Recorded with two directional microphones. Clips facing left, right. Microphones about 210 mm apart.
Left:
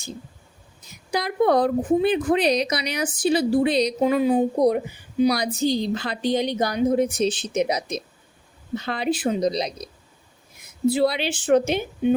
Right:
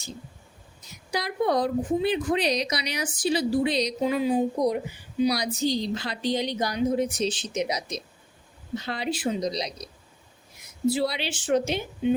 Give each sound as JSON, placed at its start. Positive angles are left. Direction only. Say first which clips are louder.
{"t": 1.1, "sound": "a woman's voice", "louder": "left 5 dB", "side_deg": 55}
{"t": 10.8, "sound": "a woman's voice", "louder": "left 5 dB", "side_deg": 55}